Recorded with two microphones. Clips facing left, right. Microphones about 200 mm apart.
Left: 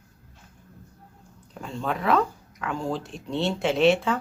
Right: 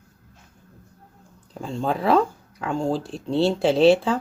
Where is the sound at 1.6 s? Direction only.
30° right (ahead or behind).